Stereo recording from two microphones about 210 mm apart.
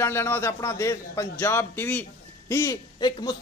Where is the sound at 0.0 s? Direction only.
10° left (ahead or behind).